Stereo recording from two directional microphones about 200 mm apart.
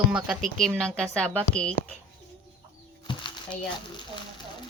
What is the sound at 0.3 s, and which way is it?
Speech, centre (ahead or behind).